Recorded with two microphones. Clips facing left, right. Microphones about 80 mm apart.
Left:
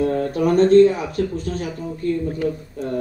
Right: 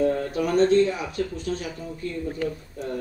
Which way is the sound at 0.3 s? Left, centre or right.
Left.